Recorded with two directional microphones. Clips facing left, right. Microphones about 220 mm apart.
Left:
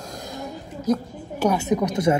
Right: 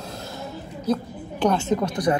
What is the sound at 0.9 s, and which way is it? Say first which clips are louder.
A woman's voice: left 2 dB; 10° left (ahead or behind).